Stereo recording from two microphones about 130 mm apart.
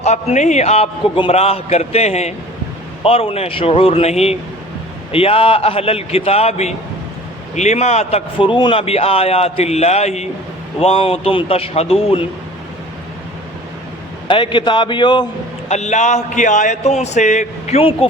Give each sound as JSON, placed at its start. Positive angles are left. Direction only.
{"t": 0.0, "sound": "a man's voice", "side_deg": 60}
{"t": 8.4, "sound": "a man's voice", "side_deg": 40}
{"t": 14.3, "sound": "a man's voice", "side_deg": 40}
{"t": 15.7, "sound": "a man's voice", "side_deg": 60}
{"t": 17.7, "sound": "a man's voice", "side_deg": 45}